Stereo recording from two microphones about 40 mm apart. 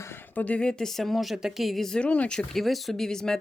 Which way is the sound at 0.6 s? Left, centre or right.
Centre.